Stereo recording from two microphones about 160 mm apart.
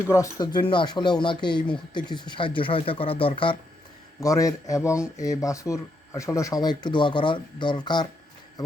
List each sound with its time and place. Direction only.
0.0 s speech: 20° left (ahead or behind)
4.2 s speech: 20° left (ahead or behind)